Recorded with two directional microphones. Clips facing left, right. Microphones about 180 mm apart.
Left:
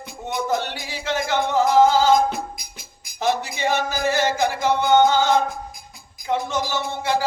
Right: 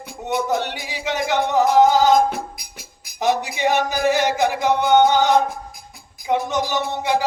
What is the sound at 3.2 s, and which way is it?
Music, 15° right (ahead or behind).